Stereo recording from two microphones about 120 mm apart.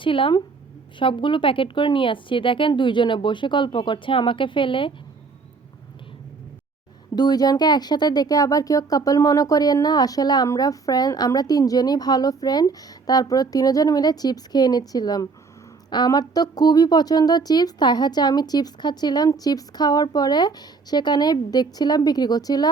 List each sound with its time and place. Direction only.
0.0 s a woman's voice: 45° left (ahead or behind)
7.2 s speech: 35° left (ahead or behind)